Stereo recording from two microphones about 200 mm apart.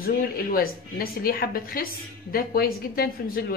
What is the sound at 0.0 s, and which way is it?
A woman's voice, 45° left (ahead or behind).